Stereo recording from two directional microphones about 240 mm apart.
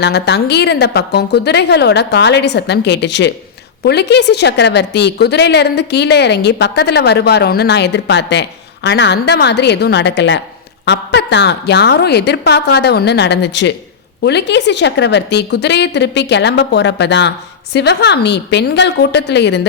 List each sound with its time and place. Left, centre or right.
0.0 s a woman's voice: left